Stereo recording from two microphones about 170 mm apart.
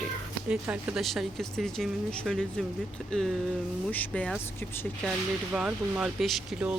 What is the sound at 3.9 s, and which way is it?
Speech, 10° left (ahead or behind).